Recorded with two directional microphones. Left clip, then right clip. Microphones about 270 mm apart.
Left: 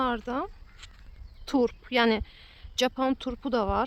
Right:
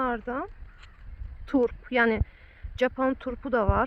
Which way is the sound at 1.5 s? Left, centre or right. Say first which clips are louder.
Right 1 dB; centre.